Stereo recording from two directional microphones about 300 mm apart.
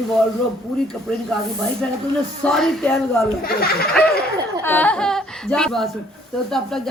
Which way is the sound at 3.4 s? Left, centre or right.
Left.